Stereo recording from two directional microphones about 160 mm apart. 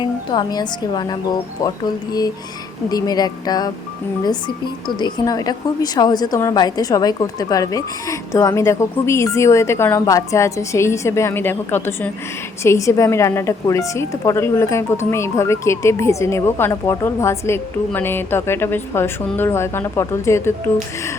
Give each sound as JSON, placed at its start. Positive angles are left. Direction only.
{"t": 0.0, "sound": "a woman's voice", "side_deg": 30}